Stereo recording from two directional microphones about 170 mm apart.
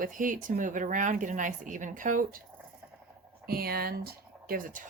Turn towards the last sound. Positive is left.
turn(degrees=-55)  # may be behind; listen again after turning